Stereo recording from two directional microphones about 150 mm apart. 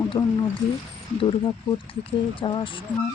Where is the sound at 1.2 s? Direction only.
35° left (ahead or behind).